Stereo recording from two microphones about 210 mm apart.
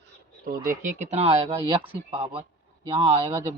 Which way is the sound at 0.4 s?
40° right (ahead or behind).